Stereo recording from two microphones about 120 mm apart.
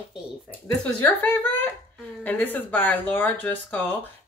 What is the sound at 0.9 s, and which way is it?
Speech, 15° left (ahead or behind).